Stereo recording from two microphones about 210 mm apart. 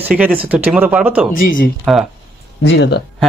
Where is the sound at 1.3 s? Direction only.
40° left (ahead or behind).